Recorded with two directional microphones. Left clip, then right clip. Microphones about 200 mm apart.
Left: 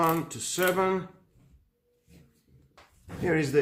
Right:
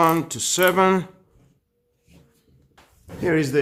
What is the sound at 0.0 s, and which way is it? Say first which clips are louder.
Speech: right 8 dB; 45° right (ahead or behind).